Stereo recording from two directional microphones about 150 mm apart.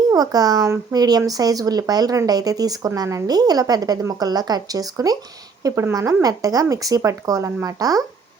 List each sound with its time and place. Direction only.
0.1 s speech: 25° right (ahead or behind)